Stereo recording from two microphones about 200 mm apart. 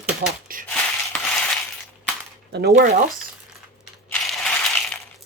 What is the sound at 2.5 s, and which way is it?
Speech, 50° right (ahead or behind).